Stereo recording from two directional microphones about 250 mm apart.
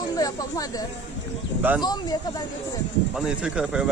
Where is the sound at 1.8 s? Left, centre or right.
Centre.